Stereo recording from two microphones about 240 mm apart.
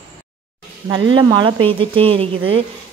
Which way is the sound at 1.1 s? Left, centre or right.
Centre.